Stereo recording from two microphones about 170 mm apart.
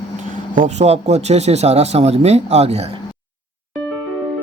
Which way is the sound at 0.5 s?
45° right (ahead or behind).